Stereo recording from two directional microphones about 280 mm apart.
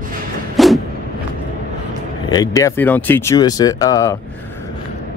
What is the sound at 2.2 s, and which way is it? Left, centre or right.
Speech, centre.